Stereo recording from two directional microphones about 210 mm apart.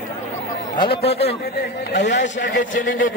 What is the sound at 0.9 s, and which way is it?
Speech, 30° left (ahead or behind).